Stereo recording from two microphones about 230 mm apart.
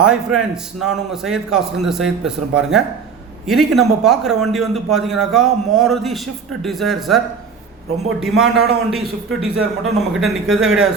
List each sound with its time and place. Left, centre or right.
0.0 s a man's voice: centre
8.2 s a man's voice: centre